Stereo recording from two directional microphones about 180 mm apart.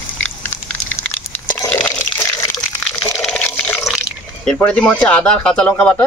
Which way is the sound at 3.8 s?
Centre (ahead or behind).